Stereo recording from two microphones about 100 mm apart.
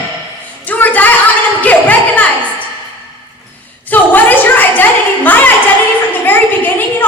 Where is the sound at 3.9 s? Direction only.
15° left (ahead or behind).